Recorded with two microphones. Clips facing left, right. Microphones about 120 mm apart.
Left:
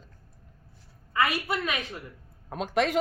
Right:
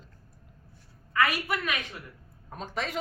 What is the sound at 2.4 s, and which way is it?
Speech, 75° left (ahead or behind).